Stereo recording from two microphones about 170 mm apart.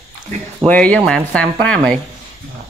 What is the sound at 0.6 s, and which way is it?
Speech, 5° left (ahead or behind).